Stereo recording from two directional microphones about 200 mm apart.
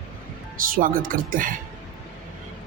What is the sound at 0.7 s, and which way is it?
Speech, 45° right (ahead or behind).